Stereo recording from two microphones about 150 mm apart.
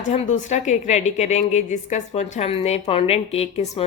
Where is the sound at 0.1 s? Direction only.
50° left (ahead or behind).